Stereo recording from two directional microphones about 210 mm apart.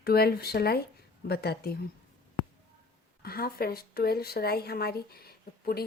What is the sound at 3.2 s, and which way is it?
A woman's voice, 45° left (ahead or behind).